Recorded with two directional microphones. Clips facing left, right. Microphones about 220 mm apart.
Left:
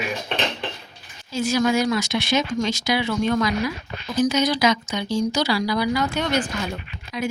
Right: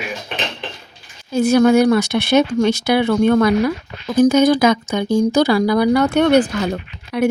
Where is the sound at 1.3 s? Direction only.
60° right (ahead or behind).